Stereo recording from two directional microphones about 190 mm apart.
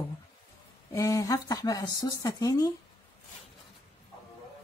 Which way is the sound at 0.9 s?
15° left (ahead or behind).